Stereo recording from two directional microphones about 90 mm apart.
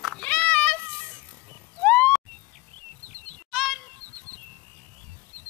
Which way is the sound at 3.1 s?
20° left (ahead or behind).